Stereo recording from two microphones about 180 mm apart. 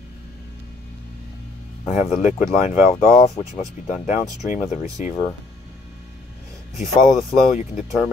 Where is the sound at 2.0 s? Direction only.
40° left (ahead or behind).